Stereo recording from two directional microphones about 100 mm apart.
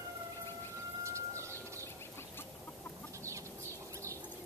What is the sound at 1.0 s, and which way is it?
Bird, 30° right (ahead or behind).